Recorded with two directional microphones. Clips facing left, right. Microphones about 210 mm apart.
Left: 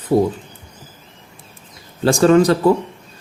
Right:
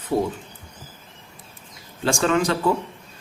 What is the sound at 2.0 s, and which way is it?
Speech, 40° left (ahead or behind).